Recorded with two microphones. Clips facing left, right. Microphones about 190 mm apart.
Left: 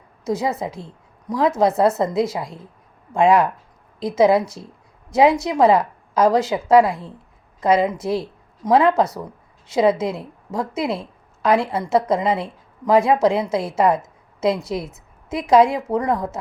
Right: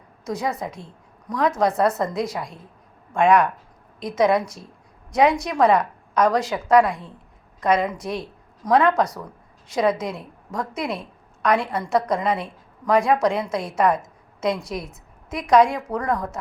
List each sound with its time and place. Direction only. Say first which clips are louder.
0.3 s a woman's voice: left 4 dB; 25° left (ahead or behind)